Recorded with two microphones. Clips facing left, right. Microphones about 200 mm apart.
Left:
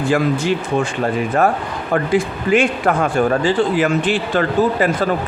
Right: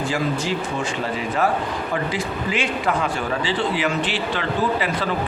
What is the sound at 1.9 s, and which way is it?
A man's voice, 55° left (ahead or behind).